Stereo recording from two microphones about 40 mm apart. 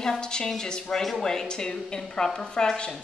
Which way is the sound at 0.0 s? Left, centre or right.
Centre.